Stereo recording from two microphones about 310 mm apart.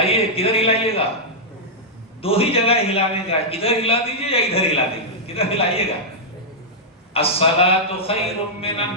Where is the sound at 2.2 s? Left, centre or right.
Centre.